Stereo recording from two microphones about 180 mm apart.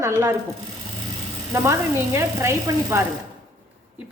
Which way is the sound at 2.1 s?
15° right (ahead or behind).